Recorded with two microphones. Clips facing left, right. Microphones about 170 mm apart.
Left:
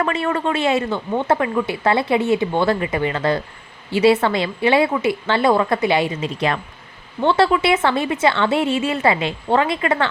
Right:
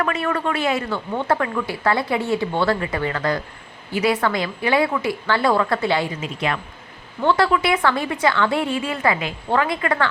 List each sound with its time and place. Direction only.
0.0 s speech: 25° left (ahead or behind)
6.2 s speech: 35° left (ahead or behind)
7.2 s speech: 25° left (ahead or behind)